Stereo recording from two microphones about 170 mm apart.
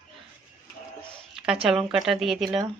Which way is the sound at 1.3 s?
5° right (ahead or behind).